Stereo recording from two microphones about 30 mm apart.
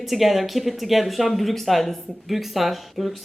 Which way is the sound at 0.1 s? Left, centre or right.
Centre.